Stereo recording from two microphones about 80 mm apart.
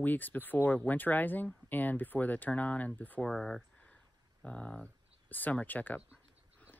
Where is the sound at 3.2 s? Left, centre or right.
Centre.